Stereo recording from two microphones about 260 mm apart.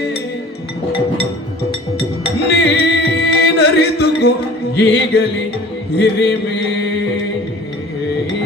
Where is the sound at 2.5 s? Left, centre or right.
Left.